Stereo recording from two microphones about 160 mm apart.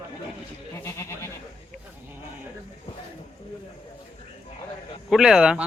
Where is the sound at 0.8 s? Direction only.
15° left (ahead or behind).